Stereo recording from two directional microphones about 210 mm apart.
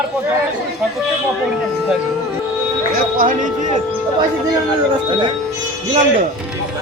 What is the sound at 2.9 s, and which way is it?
Speech, 40° right (ahead or behind).